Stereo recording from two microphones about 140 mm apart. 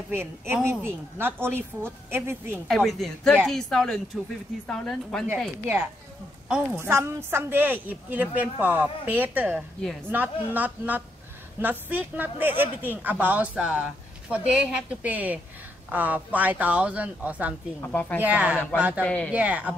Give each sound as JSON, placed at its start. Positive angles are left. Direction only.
{"t": 0.1, "sound": "a woman's voice", "side_deg": -15}
{"t": 2.7, "sound": "speech", "side_deg": 0}
{"t": 6.7, "sound": "a woman's voice", "side_deg": -20}
{"t": 17.8, "sound": "speech", "side_deg": 15}
{"t": 18.2, "sound": "a woman's voice", "side_deg": -10}
{"t": 19.0, "sound": "speech", "side_deg": 10}
{"t": 19.3, "sound": "a woman's voice", "side_deg": -10}